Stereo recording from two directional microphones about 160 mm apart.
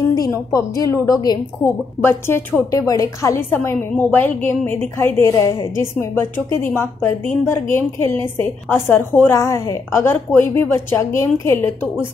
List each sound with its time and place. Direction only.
0.1 s a woman's voice: 20° left (ahead or behind)